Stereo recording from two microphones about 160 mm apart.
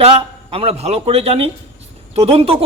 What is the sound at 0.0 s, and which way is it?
A man's voice, 35° right (ahead or behind).